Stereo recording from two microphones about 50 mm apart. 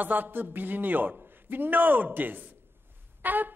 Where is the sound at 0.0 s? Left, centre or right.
Right.